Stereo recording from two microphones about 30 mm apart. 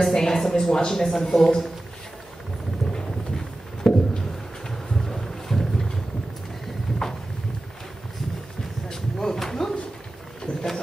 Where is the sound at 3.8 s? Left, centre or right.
Centre.